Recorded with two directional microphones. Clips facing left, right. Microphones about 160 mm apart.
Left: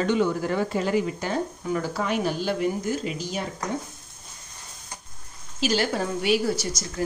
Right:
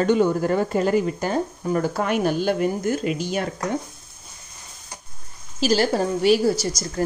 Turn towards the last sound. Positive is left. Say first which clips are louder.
# right 4 dB
turn(degrees=-35)  # may be behind; listen again after turning